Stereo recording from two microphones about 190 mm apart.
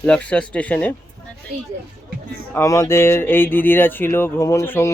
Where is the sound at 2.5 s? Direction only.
15° left (ahead or behind).